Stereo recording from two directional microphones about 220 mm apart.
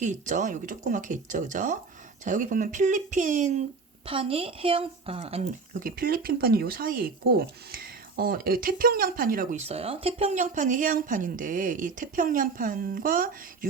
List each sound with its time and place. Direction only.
0.0 s speech: 35° right (ahead or behind)
5.8 s speech: 40° right (ahead or behind)